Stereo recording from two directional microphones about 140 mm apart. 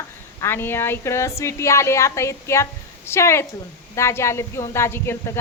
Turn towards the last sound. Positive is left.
turn(degrees=15)  # may be behind; listen again after turning